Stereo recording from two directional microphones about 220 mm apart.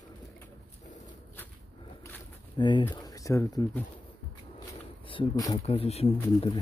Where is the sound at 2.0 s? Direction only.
15° left (ahead or behind).